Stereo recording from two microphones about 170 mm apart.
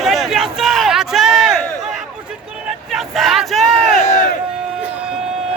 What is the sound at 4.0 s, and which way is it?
Crowd, 45° left (ahead or behind).